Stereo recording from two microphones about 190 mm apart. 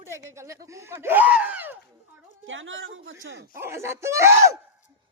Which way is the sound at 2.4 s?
90° right.